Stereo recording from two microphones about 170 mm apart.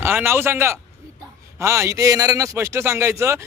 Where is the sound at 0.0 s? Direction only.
15° right (ahead or behind).